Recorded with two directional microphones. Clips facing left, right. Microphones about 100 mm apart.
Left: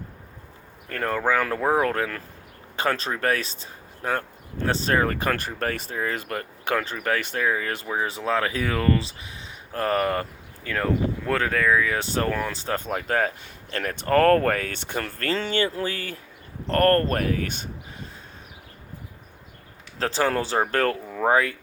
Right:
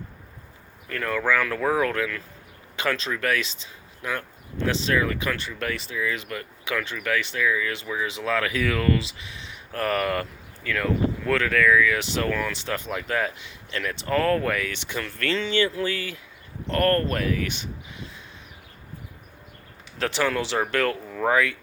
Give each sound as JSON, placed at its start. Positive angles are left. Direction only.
{"t": 0.9, "sound": "speech", "side_deg": 40}
{"t": 8.2, "sound": "speech", "side_deg": 30}
{"t": 20.0, "sound": "speech", "side_deg": 35}